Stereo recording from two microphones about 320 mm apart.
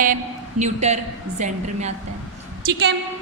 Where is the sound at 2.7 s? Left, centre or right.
Right.